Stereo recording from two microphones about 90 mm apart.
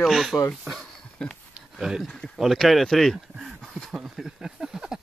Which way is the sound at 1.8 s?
5° right (ahead or behind).